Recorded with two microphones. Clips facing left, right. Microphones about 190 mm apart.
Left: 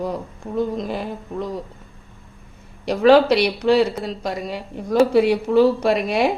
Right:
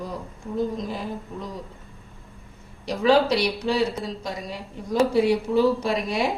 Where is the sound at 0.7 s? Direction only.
65° left (ahead or behind).